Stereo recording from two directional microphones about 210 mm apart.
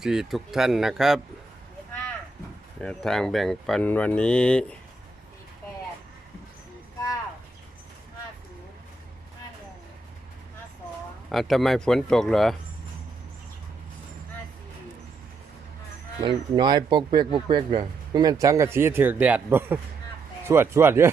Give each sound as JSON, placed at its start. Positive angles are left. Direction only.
{"t": 0.0, "sound": "speech", "side_deg": -5}
{"t": 2.8, "sound": "speech", "side_deg": 0}
{"t": 11.3, "sound": "speech", "side_deg": 0}
{"t": 16.2, "sound": "speech", "side_deg": -20}